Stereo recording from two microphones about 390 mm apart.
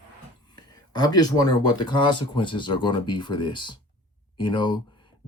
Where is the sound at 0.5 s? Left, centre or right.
Centre.